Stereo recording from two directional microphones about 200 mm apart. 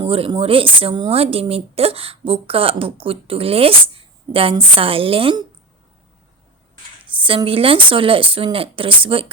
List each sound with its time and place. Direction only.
0.0 s a woman's voice: 25° right (ahead or behind)
7.2 s a woman's voice: 25° right (ahead or behind)